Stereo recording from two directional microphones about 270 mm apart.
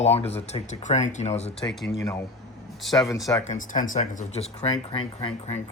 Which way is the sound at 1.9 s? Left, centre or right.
Centre.